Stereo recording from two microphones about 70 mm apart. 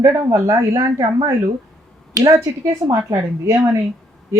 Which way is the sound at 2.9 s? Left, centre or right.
Right.